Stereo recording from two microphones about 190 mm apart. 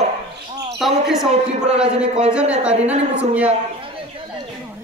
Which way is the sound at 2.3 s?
5° right (ahead or behind).